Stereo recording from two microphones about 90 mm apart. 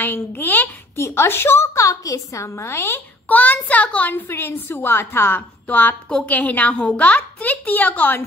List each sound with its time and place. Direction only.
0.0 s a woman's voice: 25° left (ahead or behind)